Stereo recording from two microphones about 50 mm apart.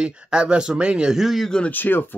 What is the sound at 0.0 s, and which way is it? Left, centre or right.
Speech, centre.